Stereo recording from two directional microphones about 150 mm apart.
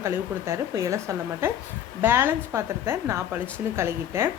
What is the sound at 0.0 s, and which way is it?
A woman's voice, 20° right (ahead or behind).